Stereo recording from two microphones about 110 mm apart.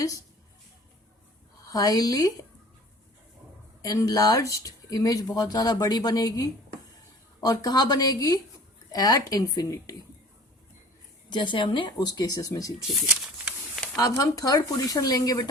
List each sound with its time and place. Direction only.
1.6 s speech: 35° left (ahead or behind)
3.8 s speech: 30° left (ahead or behind)
11.3 s speech: 45° left (ahead or behind)
12.9 s speech: 10° right (ahead or behind)
13.9 s speech: 30° left (ahead or behind)